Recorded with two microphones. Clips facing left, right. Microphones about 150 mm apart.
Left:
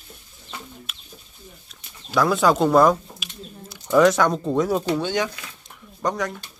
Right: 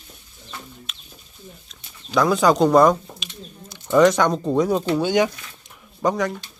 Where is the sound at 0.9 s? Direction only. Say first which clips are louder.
Left 1 dB; 5° left (ahead or behind).